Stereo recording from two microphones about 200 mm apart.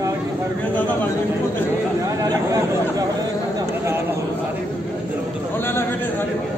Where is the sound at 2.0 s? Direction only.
15° right (ahead or behind).